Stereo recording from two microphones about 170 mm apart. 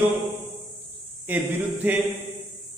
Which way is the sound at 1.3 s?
10° right (ahead or behind).